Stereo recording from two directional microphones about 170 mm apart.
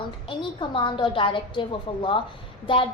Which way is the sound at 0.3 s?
30° left (ahead or behind).